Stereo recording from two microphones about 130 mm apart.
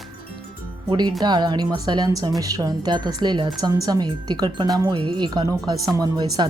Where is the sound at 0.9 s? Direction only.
35° right (ahead or behind).